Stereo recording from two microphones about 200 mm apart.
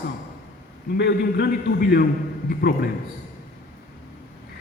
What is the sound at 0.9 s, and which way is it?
A man's voice, 55° left (ahead or behind).